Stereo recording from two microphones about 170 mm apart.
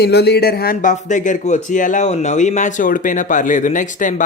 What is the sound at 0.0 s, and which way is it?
A man's voice, 80° left.